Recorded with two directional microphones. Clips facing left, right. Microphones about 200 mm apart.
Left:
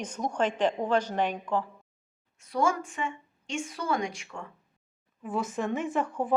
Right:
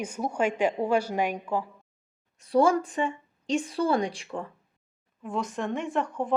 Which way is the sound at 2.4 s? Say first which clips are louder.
Right 6 dB; 35° right (ahead or behind).